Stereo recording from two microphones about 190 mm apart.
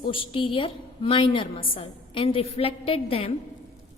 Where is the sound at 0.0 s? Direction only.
25° left (ahead or behind).